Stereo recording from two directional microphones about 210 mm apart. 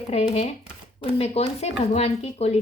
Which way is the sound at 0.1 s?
30° left (ahead or behind).